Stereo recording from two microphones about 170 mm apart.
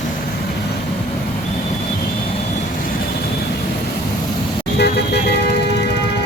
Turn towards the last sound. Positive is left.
turn(degrees=75)  # may be behind; listen again after turning